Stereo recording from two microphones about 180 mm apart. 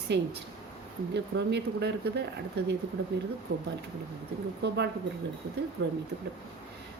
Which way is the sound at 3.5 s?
55° right (ahead or behind).